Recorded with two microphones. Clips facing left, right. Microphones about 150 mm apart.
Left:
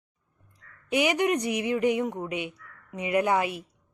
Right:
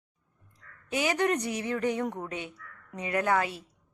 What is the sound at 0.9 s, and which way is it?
A woman's voice, 15° left (ahead or behind).